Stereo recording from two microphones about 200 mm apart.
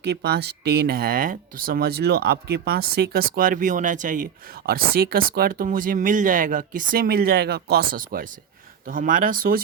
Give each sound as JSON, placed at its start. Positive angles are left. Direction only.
{"t": 0.1, "sound": "speech", "side_deg": -55}